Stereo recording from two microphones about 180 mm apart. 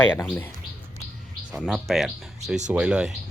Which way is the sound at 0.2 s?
10° left (ahead or behind).